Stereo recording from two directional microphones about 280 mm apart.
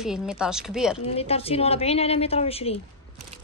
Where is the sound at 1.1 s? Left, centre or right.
Left.